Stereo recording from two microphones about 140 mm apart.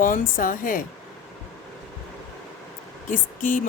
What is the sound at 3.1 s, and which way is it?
Speech, 70° left (ahead or behind).